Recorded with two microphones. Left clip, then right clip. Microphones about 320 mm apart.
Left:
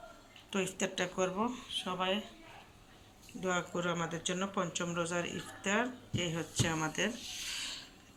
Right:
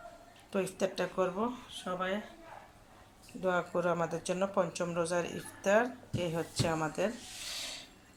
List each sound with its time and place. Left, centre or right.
0.5 s speech: centre
3.4 s speech: centre
7.5 s mechanisms: centre